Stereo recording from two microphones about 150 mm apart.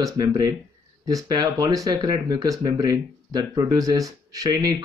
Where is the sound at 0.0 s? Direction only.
25° right (ahead or behind).